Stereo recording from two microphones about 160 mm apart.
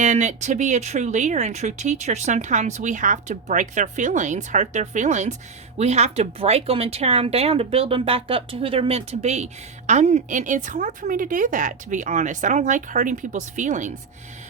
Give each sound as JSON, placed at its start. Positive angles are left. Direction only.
{"t": 0.0, "sound": "speech", "side_deg": -45}